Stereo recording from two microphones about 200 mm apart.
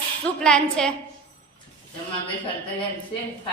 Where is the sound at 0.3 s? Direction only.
5° left (ahead or behind).